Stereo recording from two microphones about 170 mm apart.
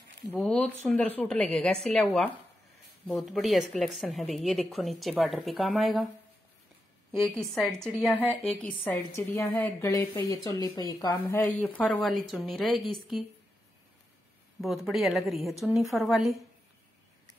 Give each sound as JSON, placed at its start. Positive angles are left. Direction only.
{"t": 0.4, "sound": "a woman's voice", "side_deg": 5}
{"t": 7.1, "sound": "a woman's voice", "side_deg": 0}
{"t": 10.1, "sound": "speech", "side_deg": 25}
{"t": 11.1, "sound": "a woman's voice", "side_deg": 10}
{"t": 14.6, "sound": "a woman's voice", "side_deg": 0}